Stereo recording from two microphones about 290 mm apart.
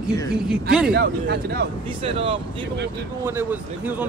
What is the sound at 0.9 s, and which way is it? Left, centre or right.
Speech, right.